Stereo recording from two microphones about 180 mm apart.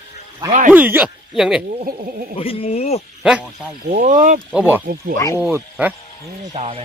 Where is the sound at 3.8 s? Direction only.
50° right (ahead or behind).